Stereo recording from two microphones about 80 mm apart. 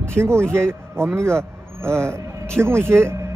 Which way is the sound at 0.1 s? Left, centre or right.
Right.